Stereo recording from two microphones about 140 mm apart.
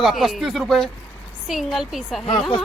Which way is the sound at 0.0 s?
Centre (ahead or behind).